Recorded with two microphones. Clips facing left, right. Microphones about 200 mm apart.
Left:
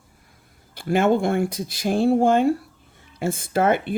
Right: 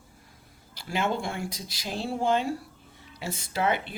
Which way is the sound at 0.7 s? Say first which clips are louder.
Left 10 dB; 55° left (ahead or behind).